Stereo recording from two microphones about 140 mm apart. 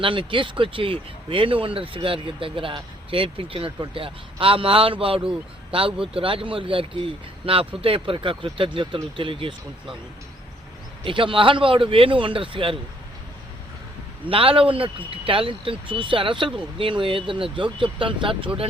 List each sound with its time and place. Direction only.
0.0 s speech: 35° right (ahead or behind)
11.0 s speech: 35° right (ahead or behind)
14.3 s speech: 40° right (ahead or behind)